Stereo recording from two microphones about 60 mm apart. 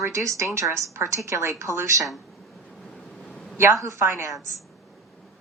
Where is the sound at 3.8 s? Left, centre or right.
Right.